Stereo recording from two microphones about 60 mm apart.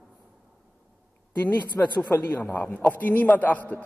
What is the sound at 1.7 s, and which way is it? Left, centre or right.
A man's voice, left.